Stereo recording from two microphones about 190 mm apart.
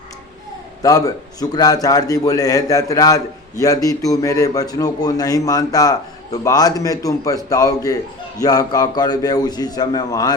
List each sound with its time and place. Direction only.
0.8 s a man's voice: 20° left (ahead or behind)